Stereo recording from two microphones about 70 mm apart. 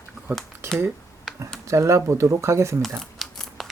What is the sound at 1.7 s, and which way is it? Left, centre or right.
Speech, right.